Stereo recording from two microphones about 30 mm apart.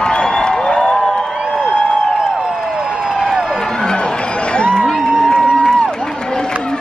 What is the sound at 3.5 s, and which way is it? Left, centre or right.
Music, left.